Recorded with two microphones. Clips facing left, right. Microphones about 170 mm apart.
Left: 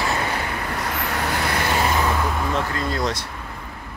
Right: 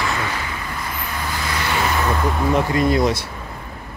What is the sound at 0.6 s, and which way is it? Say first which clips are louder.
Vehicle: left 3 dB; 70° left (ahead or behind).